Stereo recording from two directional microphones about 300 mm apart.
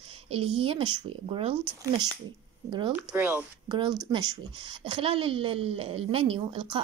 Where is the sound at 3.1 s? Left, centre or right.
Centre.